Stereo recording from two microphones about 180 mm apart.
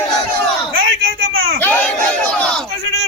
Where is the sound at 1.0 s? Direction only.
90° right.